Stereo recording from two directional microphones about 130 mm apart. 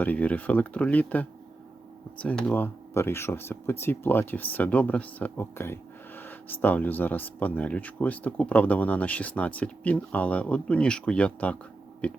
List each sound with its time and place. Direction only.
0.0 s speech: 10° left (ahead or behind)